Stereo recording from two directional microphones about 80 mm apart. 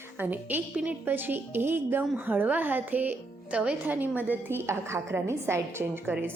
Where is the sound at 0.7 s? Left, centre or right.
Right.